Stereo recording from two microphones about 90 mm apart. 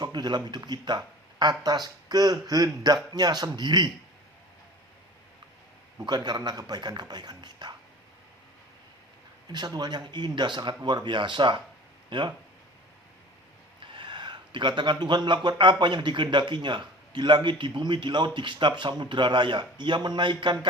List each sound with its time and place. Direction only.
0.0 s a man's voice: 55° right (ahead or behind)
6.1 s a man's voice: 50° right (ahead or behind)
9.5 s a man's voice: 50° right (ahead or behind)
13.7 s a sound: 65° right (ahead or behind)
15.4 s a man's voice: 60° right (ahead or behind)